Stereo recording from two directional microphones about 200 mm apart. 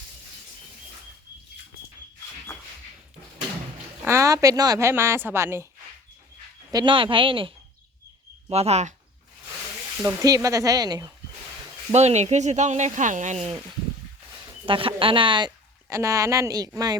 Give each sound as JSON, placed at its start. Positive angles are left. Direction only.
{"t": 4.0, "sound": "a woman's voice", "side_deg": -15}
{"t": 6.7, "sound": "a woman's voice", "side_deg": -20}
{"t": 10.2, "sound": "a woman's voice", "side_deg": -15}
{"t": 11.9, "sound": "speech", "side_deg": -35}
{"t": 14.7, "sound": "a woman's voice", "side_deg": -25}